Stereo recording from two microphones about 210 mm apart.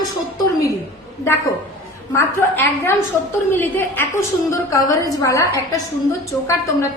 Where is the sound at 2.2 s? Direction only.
10° left (ahead or behind).